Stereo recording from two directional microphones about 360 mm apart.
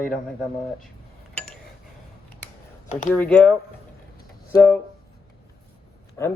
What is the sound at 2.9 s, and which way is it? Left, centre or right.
Speech, left.